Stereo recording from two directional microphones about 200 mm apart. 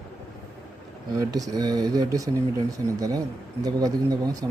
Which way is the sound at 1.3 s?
20° right (ahead or behind).